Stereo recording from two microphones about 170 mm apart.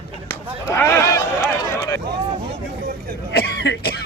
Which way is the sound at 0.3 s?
15° left (ahead or behind).